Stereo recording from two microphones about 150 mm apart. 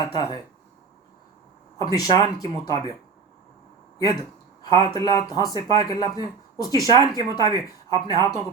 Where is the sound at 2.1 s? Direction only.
25° left (ahead or behind).